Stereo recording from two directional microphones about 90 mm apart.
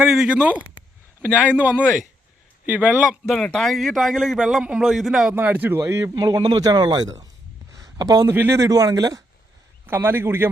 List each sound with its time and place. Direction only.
0.0 s speech: 10° right (ahead or behind)
3.2 s a man's voice: 5° left (ahead or behind)
5.3 s speech: 20° right (ahead or behind)
5.8 s speech: 35° right (ahead or behind)
6.1 s speech: 50° right (ahead or behind)
7.7 s a sound: 40° right (ahead or behind)
8.4 s speech: 30° right (ahead or behind)
9.8 s speech: 20° right (ahead or behind)